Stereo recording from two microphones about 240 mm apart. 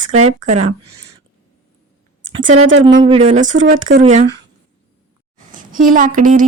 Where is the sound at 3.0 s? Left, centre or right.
Right.